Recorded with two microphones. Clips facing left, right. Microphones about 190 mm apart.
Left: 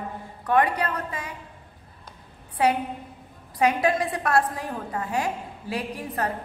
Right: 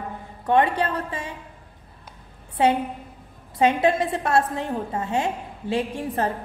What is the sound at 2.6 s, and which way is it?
A woman's voice, 25° right (ahead or behind).